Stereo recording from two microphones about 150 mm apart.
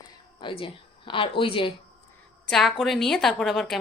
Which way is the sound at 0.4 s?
35° left (ahead or behind).